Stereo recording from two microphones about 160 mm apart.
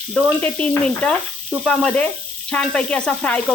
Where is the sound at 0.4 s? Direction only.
10° left (ahead or behind).